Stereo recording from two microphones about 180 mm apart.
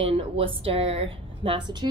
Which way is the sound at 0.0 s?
30° right (ahead or behind).